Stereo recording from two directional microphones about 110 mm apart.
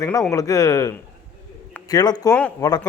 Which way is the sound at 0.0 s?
30° left (ahead or behind).